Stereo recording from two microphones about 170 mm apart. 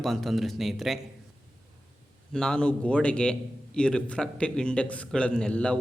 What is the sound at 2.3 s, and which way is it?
A man's voice, 5° left (ahead or behind).